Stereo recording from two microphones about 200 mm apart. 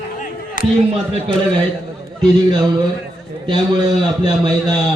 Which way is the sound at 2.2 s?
20° right (ahead or behind).